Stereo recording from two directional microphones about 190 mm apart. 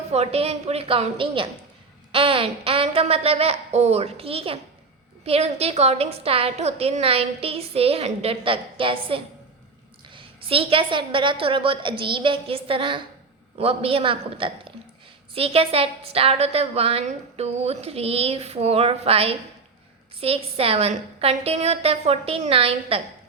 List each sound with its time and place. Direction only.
0.1 s a woman's voice: 35° right (ahead or behind)